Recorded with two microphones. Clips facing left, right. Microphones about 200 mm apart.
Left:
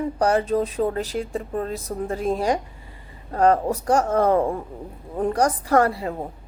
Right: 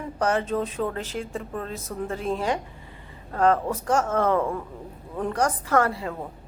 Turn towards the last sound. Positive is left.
turn(degrees=35)  # may be behind; listen again after turning